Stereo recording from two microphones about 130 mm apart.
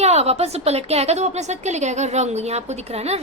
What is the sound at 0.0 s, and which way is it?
A woman's voice, 55° right (ahead or behind).